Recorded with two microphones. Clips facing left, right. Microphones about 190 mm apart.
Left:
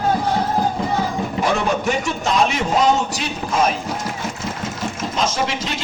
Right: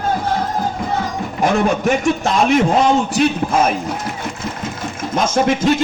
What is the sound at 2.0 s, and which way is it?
Speech, 50° right (ahead or behind).